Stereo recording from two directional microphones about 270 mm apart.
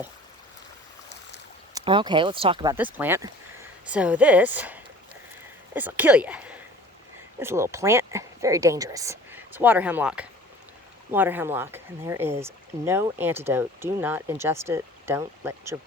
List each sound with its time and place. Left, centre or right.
1.7 s speech: centre
2.7 s speech: centre